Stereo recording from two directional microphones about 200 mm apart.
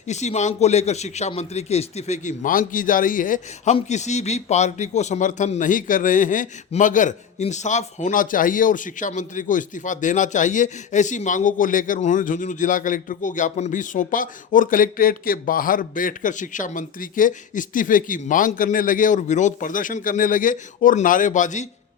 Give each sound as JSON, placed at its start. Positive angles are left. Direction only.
{"t": 0.1, "sound": "a man's voice", "side_deg": 35}